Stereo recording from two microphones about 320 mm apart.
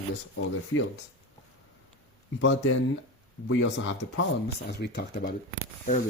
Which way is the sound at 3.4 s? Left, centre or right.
Left.